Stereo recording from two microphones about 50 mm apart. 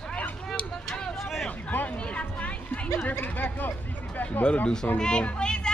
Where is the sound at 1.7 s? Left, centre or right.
Left.